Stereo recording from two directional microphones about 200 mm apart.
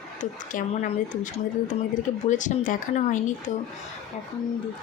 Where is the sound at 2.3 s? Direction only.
40° left (ahead or behind).